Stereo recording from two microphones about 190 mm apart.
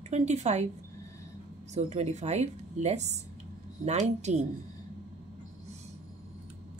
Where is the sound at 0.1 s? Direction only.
35° right (ahead or behind).